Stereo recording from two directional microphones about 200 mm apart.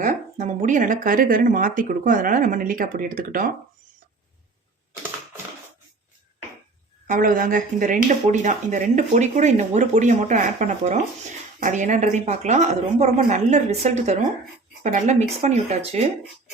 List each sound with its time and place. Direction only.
0.0 s speech: 40° right (ahead or behind)
7.1 s speech: 40° right (ahead or behind)